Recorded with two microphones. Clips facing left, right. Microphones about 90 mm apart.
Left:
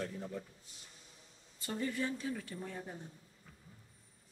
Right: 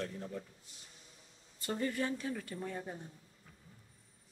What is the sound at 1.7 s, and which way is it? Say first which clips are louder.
Speech: right 2 dB; 55° right (ahead or behind).